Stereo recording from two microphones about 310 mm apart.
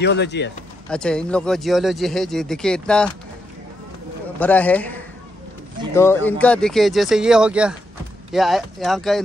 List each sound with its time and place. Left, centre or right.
0.0 s speech: left
0.8 s speech: centre
4.4 s speech: centre
5.9 s speech: centre